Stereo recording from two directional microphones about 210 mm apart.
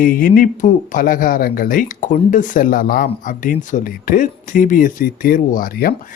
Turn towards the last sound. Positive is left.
turn(degrees=45)  # may be behind; listen again after turning